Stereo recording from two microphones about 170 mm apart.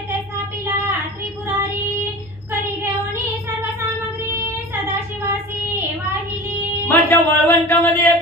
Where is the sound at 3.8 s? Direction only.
15° right (ahead or behind).